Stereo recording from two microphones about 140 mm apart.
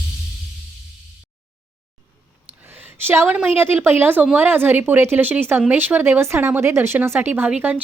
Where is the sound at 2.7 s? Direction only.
15° right (ahead or behind).